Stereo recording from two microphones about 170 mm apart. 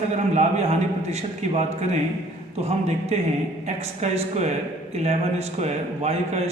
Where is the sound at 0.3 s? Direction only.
40° right (ahead or behind).